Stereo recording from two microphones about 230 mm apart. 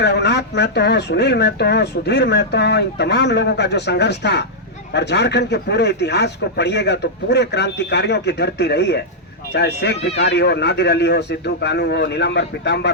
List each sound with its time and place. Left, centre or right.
0.0 s speech: left